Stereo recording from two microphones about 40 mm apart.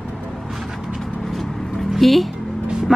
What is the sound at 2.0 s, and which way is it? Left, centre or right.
Speech, centre.